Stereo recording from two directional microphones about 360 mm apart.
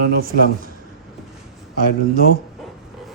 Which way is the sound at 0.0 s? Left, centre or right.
Right.